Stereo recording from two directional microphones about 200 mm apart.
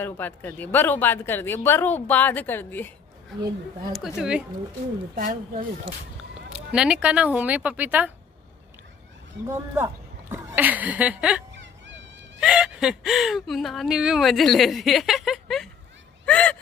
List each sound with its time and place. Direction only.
0.0 s speech: 10° left (ahead or behind)
3.9 s speech: centre (ahead or behind)
5.1 s speech: 45° right (ahead or behind)
6.5 s speech: 5° right (ahead or behind)
10.3 s speech: 10° right (ahead or behind)
11.5 s whimper: 65° right (ahead or behind)
12.4 s speech: 5° right (ahead or behind)
16.3 s a sound: 5° left (ahead or behind)